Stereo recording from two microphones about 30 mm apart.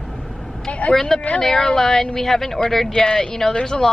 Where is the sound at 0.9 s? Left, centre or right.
Centre.